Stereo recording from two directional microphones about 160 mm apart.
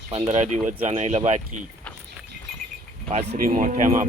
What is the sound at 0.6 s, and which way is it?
Speech, 10° right (ahead or behind).